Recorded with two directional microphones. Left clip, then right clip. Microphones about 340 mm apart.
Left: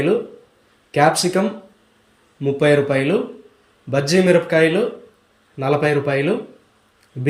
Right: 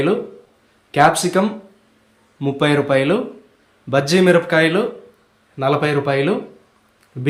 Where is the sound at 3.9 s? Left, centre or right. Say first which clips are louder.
Right 1 dB; centre.